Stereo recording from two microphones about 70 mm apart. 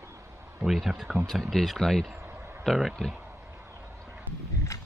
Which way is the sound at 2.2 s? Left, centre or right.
Right.